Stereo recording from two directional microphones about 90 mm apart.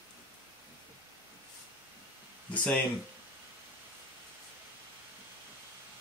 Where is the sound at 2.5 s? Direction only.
15° left (ahead or behind).